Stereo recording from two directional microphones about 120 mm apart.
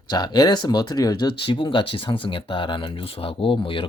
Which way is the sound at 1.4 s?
45° left (ahead or behind).